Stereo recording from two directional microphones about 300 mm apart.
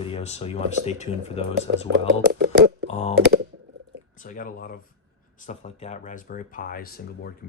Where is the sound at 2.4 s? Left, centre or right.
Right.